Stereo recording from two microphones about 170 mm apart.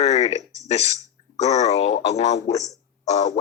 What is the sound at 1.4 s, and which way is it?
Speech, 40° left (ahead or behind).